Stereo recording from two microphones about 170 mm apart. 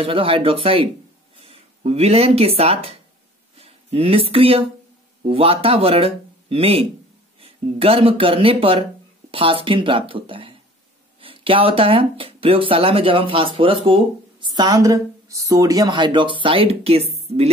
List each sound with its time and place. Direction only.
0.0 s speech: 30° right (ahead or behind)